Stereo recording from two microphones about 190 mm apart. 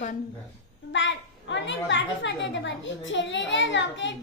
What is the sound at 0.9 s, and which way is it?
A child's voice, 75° left (ahead or behind).